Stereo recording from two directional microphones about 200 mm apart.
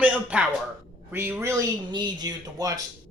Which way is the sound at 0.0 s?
5° right (ahead or behind).